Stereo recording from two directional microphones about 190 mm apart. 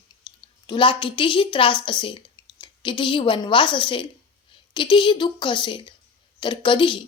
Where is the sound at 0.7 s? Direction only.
25° left (ahead or behind).